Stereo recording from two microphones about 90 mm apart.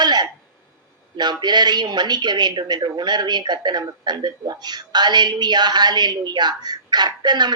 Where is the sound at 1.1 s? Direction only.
55° right (ahead or behind).